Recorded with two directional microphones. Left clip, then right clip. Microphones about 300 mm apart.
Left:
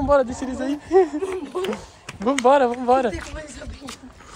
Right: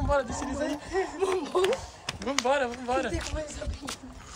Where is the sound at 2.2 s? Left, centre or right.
Centre.